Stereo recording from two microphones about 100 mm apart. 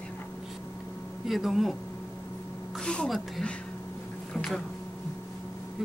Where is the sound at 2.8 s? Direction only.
10° left (ahead or behind).